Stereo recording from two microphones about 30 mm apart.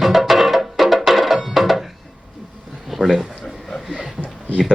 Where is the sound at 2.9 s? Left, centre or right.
Centre.